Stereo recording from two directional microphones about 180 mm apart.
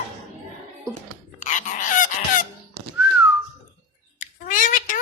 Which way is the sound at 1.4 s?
45° left (ahead or behind).